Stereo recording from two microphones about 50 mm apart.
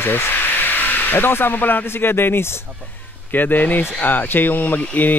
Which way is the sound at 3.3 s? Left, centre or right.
Left.